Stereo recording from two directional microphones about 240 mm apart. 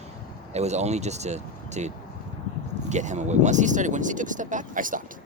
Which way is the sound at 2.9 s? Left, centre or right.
Right.